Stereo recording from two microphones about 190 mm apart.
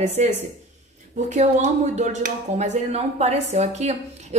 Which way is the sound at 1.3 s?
40° right (ahead or behind).